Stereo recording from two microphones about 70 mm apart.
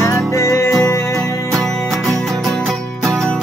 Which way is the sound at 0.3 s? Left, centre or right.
Left.